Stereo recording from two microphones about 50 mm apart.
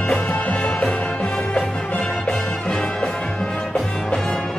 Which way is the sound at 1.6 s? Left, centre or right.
Centre.